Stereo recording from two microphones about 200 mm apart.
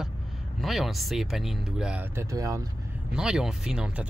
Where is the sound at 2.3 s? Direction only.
15° right (ahead or behind).